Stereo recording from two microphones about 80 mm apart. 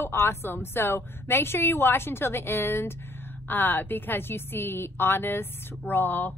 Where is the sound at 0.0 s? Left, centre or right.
Left.